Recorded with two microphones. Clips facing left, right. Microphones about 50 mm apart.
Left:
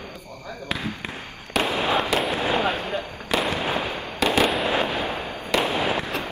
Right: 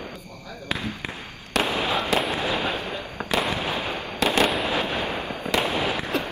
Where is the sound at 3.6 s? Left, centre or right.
Left.